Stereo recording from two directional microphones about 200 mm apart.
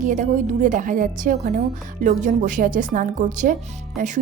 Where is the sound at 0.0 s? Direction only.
40° right (ahead or behind).